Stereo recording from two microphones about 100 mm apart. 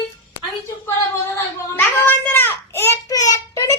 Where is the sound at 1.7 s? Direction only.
20° left (ahead or behind).